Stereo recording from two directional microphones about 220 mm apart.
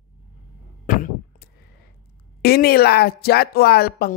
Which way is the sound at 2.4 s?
45° left (ahead or behind).